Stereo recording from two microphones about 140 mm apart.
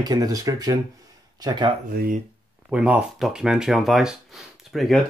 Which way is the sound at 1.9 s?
85° right.